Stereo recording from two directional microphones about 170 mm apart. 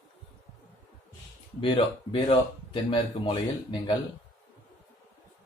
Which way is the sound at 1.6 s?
30° left (ahead or behind).